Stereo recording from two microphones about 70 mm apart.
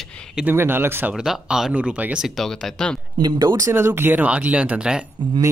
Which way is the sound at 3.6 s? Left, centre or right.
Right.